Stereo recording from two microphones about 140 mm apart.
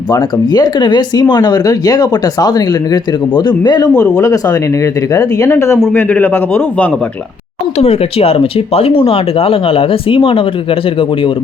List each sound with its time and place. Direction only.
0.1 s a man's voice: 30° left (ahead or behind)
7.8 s speech: 45° left (ahead or behind)